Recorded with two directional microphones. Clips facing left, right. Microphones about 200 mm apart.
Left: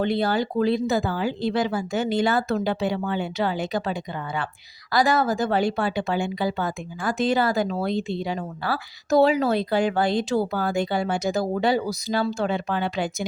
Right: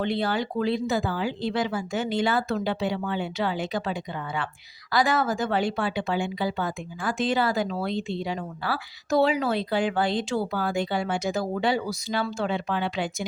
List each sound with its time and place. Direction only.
0.0 s a woman's voice: 40° left (ahead or behind)